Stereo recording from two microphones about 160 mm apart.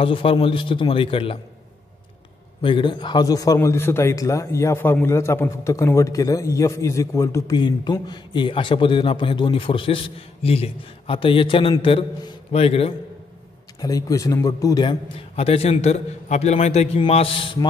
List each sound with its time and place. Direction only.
0.0 s a man's voice: 35° left (ahead or behind)
2.6 s a man's voice: 30° left (ahead or behind)
13.7 s a man's voice: 20° left (ahead or behind)